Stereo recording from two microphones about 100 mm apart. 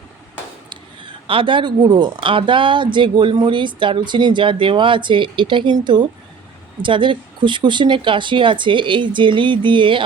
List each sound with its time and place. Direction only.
1.3 s speech: 55° right (ahead or behind)